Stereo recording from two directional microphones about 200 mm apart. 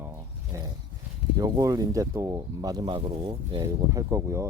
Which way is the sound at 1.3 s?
15° right (ahead or behind).